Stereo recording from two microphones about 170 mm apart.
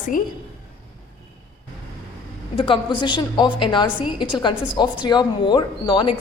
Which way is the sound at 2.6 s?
30° left (ahead or behind).